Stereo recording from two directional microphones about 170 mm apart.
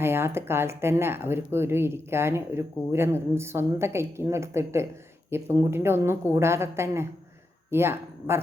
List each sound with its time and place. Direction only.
0.0 s speech: 15° right (ahead or behind)